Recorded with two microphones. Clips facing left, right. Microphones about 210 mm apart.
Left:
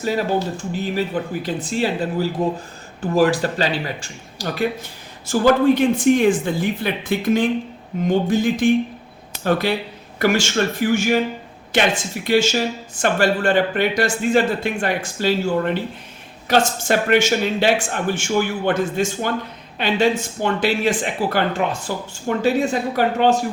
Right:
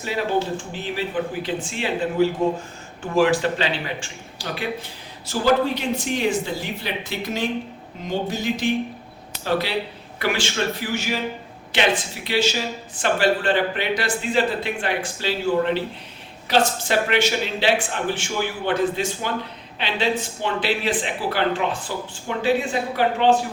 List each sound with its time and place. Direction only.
0.0 s speech: 40° left (ahead or behind)